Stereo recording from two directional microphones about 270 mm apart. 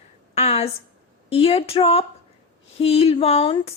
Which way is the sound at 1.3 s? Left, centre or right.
Left.